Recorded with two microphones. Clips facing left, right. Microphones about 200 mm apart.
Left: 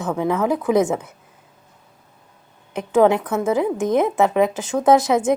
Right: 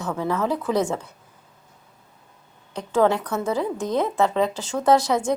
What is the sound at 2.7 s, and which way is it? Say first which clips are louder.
A woman's voice: left 4 dB; 20° left (ahead or behind).